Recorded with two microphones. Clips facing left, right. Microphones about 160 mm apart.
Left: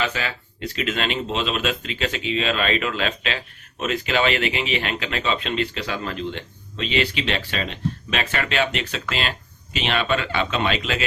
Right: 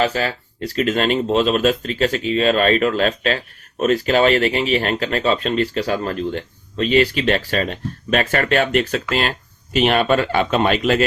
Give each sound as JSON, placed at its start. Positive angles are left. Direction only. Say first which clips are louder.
{"t": 0.0, "sound": "speech", "louder": "right 7 dB", "side_deg": -40}